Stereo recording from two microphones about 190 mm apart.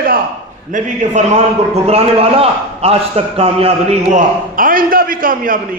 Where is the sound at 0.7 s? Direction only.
40° right (ahead or behind).